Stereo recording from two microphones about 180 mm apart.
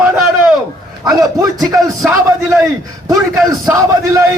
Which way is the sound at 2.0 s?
5° right (ahead or behind).